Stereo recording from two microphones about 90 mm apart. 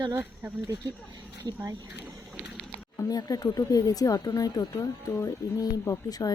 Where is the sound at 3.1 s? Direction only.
45° left (ahead or behind).